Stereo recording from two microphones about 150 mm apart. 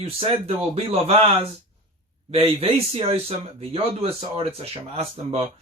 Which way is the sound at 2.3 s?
40° right (ahead or behind).